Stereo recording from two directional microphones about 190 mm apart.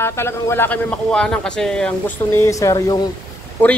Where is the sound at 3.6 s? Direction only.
10° left (ahead or behind).